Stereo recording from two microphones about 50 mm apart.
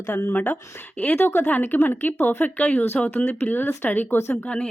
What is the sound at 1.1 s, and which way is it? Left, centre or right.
Speech, left.